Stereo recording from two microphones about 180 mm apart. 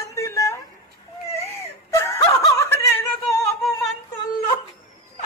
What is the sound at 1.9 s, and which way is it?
Snicker, 15° left (ahead or behind).